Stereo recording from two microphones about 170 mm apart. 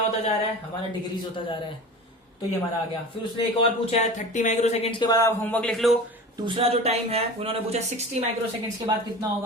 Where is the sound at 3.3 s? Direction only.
35° left (ahead or behind).